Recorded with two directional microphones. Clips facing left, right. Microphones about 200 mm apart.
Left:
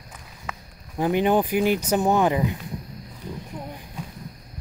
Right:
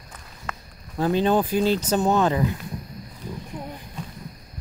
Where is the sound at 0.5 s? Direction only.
15° left (ahead or behind).